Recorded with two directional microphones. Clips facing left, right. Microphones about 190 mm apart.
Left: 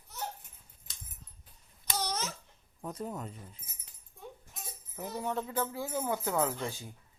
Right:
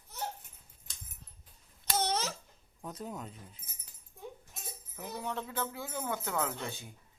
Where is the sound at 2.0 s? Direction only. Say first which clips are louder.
Right 3 dB; 30° right (ahead or behind).